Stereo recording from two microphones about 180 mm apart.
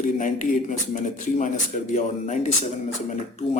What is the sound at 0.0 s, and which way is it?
A man's voice, 45° left (ahead or behind).